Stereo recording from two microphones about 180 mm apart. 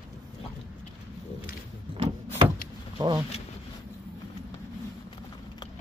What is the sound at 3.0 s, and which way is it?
Speech, 20° right (ahead or behind).